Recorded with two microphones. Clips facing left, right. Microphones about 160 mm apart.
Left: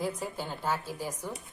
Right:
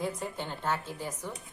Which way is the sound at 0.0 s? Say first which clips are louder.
Left 1 dB; 5° left (ahead or behind).